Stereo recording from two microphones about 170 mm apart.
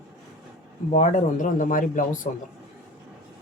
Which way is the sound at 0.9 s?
50° left (ahead or behind).